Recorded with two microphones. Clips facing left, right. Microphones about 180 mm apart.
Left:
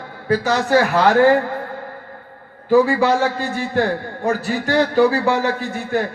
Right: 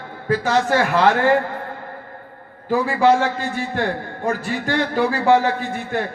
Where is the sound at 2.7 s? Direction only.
40° left (ahead or behind).